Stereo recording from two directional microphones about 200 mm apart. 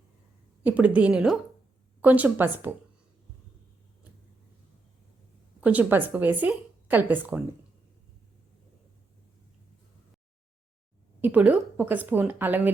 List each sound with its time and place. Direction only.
0.6 s a woman's voice: 5° right (ahead or behind)
5.5 s a woman's voice: 5° right (ahead or behind)
11.2 s a woman's voice: 10° right (ahead or behind)